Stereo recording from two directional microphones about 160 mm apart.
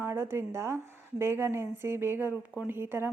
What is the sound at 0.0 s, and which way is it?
A woman's voice, 15° right (ahead or behind).